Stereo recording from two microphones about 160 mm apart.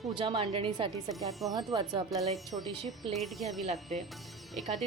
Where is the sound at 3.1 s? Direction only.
Centre (ahead or behind).